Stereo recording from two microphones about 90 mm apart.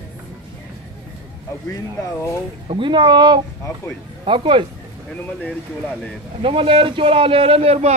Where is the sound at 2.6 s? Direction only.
65° right (ahead or behind).